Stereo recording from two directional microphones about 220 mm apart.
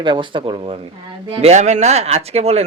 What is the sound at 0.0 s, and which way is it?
Speech, 20° right (ahead or behind).